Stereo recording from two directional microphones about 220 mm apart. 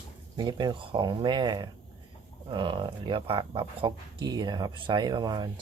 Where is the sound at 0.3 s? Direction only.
20° right (ahead or behind).